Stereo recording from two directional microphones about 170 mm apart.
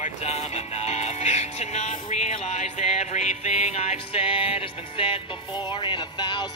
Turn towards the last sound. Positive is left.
turn(degrees=25)  # may be behind; listen again after turning